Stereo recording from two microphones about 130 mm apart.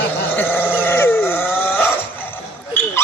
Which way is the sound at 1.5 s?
15° left (ahead or behind).